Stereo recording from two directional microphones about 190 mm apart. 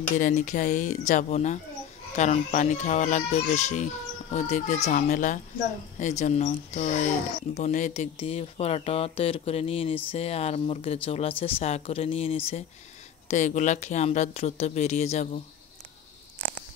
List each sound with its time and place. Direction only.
0.2 s speech: 40° left (ahead or behind)